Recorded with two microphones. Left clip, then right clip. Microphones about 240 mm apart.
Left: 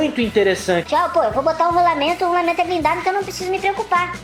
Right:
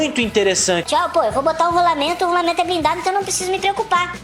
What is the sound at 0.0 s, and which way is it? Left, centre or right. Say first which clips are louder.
Speech: even; right.